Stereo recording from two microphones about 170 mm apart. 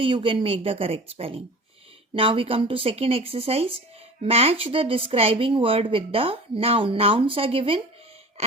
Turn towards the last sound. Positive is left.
turn(degrees=-30)  # may be behind; listen again after turning